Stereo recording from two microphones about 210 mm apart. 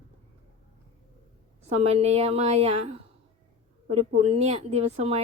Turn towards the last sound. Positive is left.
turn(degrees=-30)  # may be behind; listen again after turning